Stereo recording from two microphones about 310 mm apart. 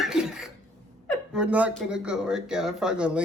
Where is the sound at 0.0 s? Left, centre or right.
Centre.